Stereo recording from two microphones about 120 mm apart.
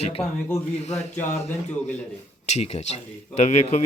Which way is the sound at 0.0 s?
55° left (ahead or behind).